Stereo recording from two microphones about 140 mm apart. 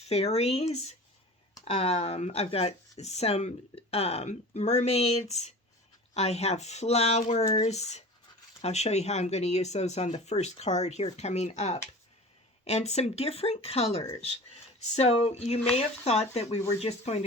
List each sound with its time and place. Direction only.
0.0 s speech: 50° left (ahead or behind)